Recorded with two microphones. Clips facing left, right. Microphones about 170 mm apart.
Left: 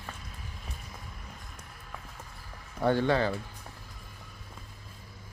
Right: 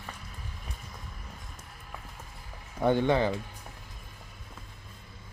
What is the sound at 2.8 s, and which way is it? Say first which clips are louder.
Speech: right 1 dB; 20° right (ahead or behind).